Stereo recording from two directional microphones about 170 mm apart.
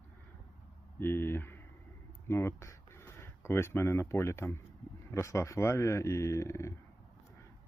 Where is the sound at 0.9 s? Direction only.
15° left (ahead or behind).